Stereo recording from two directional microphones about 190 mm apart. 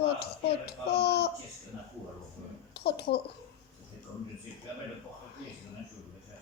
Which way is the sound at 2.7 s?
60° left (ahead or behind).